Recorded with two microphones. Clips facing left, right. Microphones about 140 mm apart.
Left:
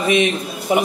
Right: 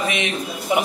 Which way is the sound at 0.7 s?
35° left (ahead or behind).